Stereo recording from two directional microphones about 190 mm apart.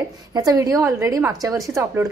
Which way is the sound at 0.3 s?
20° right (ahead or behind).